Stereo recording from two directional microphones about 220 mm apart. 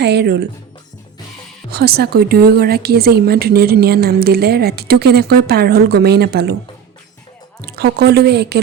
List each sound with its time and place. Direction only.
0.0 s a woman's voice: 50° right (ahead or behind)
1.7 s a woman's voice: 45° right (ahead or behind)
7.7 s a woman's voice: 45° right (ahead or behind)